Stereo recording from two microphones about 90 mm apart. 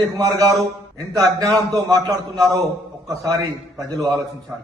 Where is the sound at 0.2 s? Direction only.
45° right (ahead or behind).